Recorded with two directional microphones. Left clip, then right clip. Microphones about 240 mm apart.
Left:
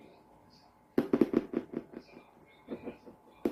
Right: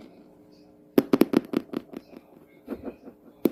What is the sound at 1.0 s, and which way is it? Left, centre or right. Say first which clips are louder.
Hands: right 7 dB; right.